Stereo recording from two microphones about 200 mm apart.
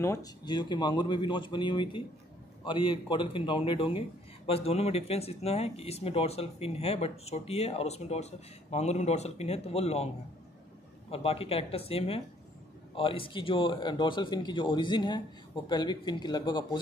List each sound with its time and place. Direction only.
0.0 s speech: 15° left (ahead or behind)
11.1 s speech: 30° left (ahead or behind)